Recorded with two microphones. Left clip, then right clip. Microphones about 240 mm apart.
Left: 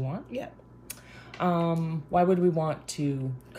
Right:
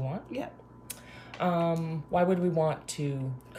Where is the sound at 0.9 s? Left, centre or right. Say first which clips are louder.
Even; centre.